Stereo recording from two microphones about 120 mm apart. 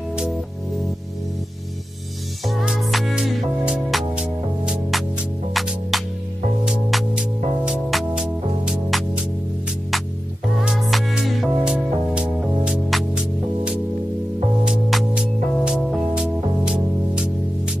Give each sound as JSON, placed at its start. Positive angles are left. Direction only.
{"t": 2.4, "sound": "music", "side_deg": 0}
{"t": 10.6, "sound": "music", "side_deg": 0}
{"t": 14.6, "sound": "music", "side_deg": -5}